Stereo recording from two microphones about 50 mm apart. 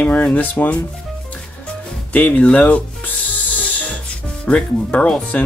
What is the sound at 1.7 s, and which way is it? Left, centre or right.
Music, left.